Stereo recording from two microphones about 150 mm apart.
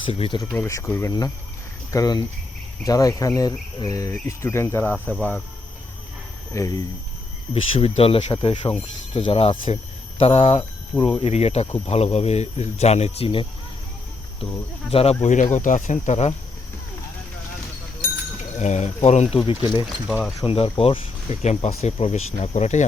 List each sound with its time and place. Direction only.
0.1 s speech: 40° left (ahead or behind)
0.3 s speech: 15° left (ahead or behind)
5.0 s cricket: 5° left (ahead or behind)
6.5 s speech: 20° left (ahead or behind)
7.5 s speech: 40° left (ahead or behind)
11.0 s speech: 35° left (ahead or behind)
14.8 s speech: 40° left (ahead or behind)
15.2 s speech: 55° left (ahead or behind)
18.6 s speech: 50° left (ahead or behind)
19.4 s speech: 30° left (ahead or behind); by 22.9 s 50° left (ahead or behind)